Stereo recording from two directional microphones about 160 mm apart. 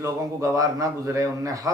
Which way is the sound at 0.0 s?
20° right (ahead or behind).